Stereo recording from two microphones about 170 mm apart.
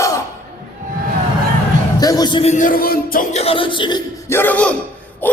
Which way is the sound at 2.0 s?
20° left (ahead or behind).